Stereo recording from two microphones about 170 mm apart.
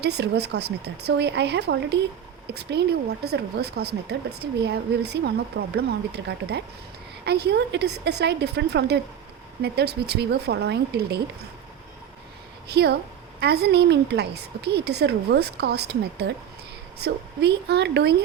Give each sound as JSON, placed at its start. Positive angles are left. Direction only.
{"t": 0.0, "sound": "a woman's voice", "side_deg": -75}
{"t": 9.6, "sound": "a woman's voice", "side_deg": -70}
{"t": 12.6, "sound": "a woman's voice", "side_deg": -70}